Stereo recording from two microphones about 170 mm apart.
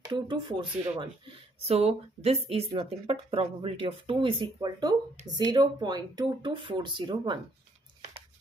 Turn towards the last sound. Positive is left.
turn(degrees=-25)  # may be behind; listen again after turning